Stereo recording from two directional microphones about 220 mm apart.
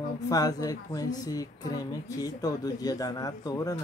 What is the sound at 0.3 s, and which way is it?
A woman's voice, 15° left (ahead or behind).